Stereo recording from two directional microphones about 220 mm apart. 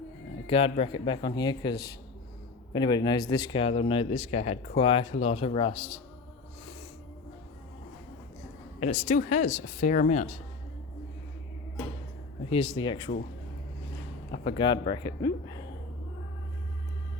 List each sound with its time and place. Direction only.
0.4 s speech: 25° left (ahead or behind)
8.8 s speech: 30° left (ahead or behind)
12.5 s speech: 25° left (ahead or behind)
14.4 s speech: 20° left (ahead or behind)